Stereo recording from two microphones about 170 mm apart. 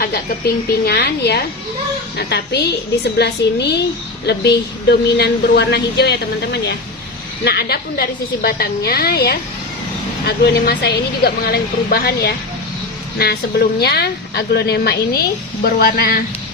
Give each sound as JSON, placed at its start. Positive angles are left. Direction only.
{"t": 0.0, "sound": "a woman's voice", "side_deg": 65}